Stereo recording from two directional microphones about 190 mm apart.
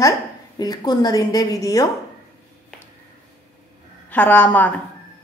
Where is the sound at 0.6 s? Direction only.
20° left (ahead or behind).